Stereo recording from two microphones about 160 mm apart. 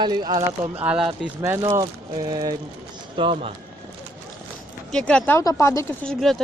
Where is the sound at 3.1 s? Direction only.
35° right (ahead or behind).